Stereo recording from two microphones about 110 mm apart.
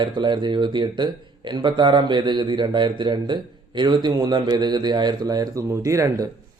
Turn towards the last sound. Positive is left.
turn(degrees=-30)  # may be behind; listen again after turning